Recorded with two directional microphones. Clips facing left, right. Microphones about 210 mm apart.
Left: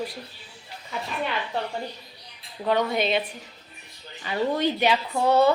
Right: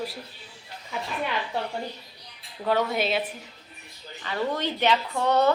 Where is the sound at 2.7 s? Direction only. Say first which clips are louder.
Left 1 dB; 5° right (ahead or behind).